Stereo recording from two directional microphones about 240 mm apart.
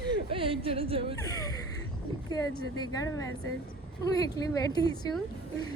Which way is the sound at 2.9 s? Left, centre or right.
Centre.